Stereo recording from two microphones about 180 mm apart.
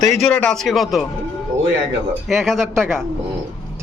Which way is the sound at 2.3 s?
Centre (ahead or behind).